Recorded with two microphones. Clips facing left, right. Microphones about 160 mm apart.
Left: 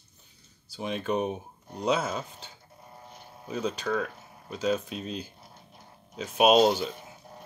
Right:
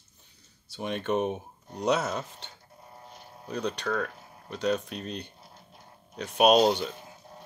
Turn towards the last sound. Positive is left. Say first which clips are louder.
# left 1 dB
turn(degrees=5)  # may be behind; listen again after turning